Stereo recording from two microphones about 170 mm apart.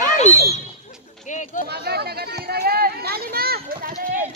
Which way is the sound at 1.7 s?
70° right (ahead or behind).